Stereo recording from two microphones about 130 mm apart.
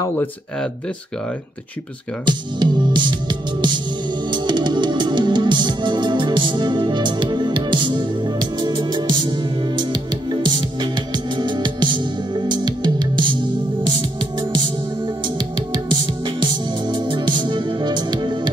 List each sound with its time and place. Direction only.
2.2 s music: 35° right (ahead or behind)
15.2 s music: 35° right (ahead or behind)